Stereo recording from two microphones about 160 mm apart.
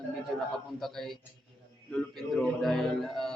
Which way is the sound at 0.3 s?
Centre (ahead or behind).